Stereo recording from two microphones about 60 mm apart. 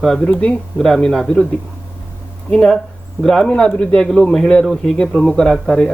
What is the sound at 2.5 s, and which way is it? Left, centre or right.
Speech, centre.